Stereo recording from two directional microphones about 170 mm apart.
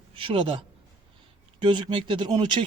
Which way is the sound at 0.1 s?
30° right (ahead or behind).